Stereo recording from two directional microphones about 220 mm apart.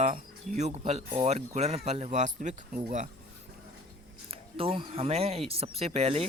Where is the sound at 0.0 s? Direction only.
35° right (ahead or behind).